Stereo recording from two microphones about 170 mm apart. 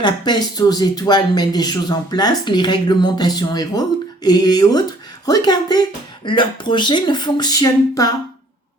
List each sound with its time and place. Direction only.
0.0 s speech: 25° left (ahead or behind)